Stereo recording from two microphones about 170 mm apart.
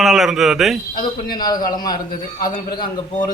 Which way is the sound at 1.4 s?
25° left (ahead or behind).